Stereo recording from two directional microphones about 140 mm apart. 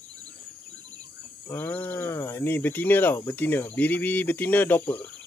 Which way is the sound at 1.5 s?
15° left (ahead or behind).